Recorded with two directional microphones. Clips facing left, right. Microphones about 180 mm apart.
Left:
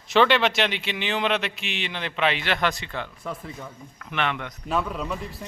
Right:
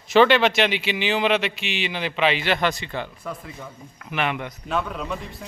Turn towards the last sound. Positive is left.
turn(degrees=0)  # may be behind; listen again after turning